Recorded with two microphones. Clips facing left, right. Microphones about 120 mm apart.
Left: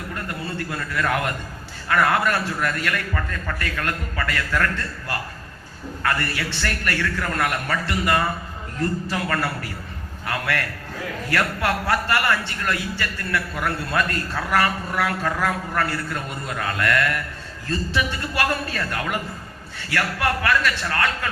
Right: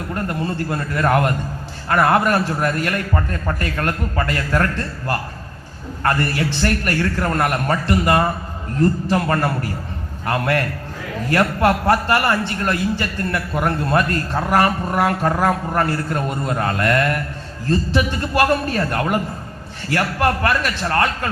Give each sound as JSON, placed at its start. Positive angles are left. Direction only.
{"t": 0.1, "sound": "a man's voice", "side_deg": -35}
{"t": 14.1, "sound": "speech", "side_deg": -40}
{"t": 14.6, "sound": "a man's voice", "side_deg": -25}